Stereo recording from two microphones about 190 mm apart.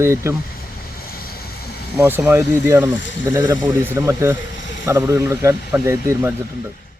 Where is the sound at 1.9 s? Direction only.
10° right (ahead or behind).